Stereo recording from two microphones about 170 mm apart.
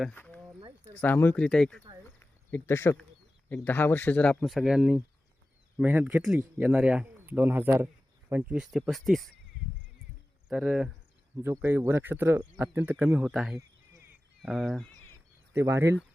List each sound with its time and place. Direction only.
0.0 s speech: 5° left (ahead or behind)
2.0 s a sound: 10° left (ahead or behind)
3.5 s speech: 10° left (ahead or behind)
10.5 s speech: 5° right (ahead or behind)
15.5 s speech: 15° right (ahead or behind)